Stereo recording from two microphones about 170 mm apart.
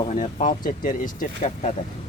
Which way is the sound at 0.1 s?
40° left (ahead or behind).